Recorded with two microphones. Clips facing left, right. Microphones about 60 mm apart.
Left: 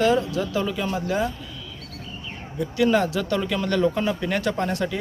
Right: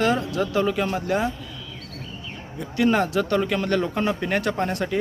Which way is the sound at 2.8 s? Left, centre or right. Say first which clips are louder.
Even; right.